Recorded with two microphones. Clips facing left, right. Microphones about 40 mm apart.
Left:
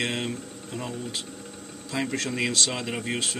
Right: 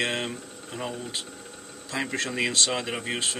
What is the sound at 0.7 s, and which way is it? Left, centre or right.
A man's voice, centre.